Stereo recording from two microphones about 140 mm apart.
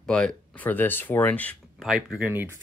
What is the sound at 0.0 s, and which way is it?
Speech, 5° left (ahead or behind).